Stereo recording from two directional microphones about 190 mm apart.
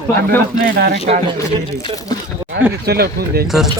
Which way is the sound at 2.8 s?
55° right (ahead or behind).